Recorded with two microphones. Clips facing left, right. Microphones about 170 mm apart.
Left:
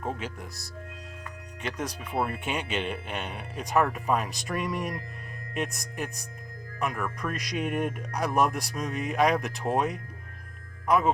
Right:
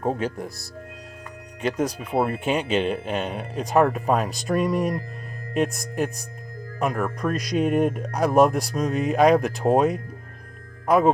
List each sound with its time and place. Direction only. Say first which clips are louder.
0.0 s speech: right 9 dB; 35° right (ahead or behind)
6.7 s speech: right 6 dB; 35° right (ahead or behind)